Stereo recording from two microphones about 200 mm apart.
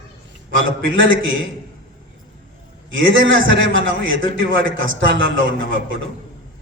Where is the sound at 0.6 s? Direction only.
70° right (ahead or behind).